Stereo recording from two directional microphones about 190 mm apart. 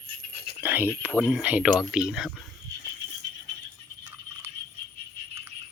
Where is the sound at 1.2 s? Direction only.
5° right (ahead or behind).